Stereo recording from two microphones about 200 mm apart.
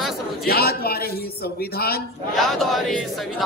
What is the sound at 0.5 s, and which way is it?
A man's voice, 50° left (ahead or behind).